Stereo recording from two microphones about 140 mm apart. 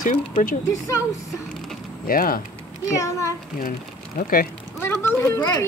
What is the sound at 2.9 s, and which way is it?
Speech, 20° left (ahead or behind).